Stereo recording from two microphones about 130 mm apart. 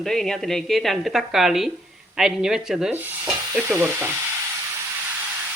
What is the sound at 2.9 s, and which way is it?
Stir, 15° right (ahead or behind).